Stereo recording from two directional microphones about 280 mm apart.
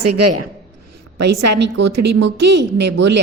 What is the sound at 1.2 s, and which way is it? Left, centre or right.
A woman's voice, right.